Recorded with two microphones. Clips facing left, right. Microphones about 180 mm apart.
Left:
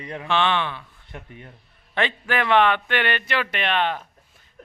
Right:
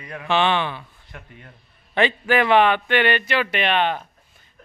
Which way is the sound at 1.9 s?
5° right (ahead or behind).